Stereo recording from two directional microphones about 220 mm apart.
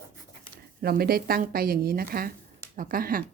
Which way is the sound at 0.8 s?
45° right (ahead or behind).